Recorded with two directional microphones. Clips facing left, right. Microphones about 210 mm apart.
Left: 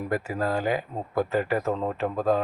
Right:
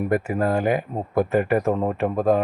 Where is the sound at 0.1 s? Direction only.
50° right (ahead or behind).